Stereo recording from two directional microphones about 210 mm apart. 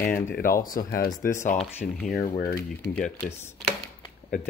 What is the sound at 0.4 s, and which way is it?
Speech, 40° left (ahead or behind).